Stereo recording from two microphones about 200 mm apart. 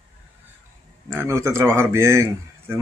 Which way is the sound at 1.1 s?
15° right (ahead or behind).